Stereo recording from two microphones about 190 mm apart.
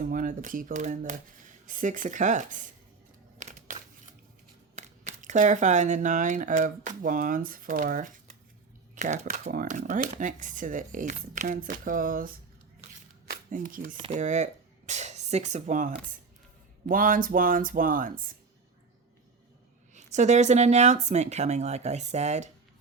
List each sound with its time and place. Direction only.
0.0 s speech: 45° right (ahead or behind)
3.3 s crumpling: 40° right (ahead or behind)
4.7 s speech: 40° right (ahead or behind)
19.9 s speech: 40° right (ahead or behind)